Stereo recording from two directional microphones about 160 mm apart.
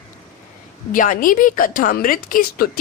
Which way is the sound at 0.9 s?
60° left (ahead or behind).